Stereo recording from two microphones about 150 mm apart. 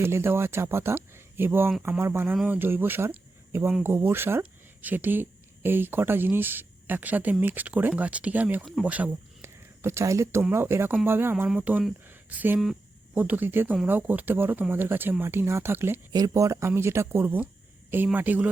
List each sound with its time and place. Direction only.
0.0 s speech: 15° right (ahead or behind)
12.0 s a sound: 10° right (ahead or behind)
13.1 s speech: 10° right (ahead or behind)